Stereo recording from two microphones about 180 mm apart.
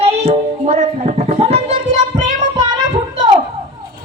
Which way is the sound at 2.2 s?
25° right (ahead or behind).